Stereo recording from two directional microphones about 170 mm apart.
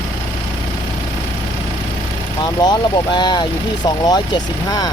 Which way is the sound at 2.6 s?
25° left (ahead or behind).